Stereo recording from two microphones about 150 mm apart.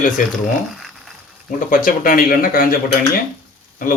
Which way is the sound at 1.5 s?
60° left (ahead or behind).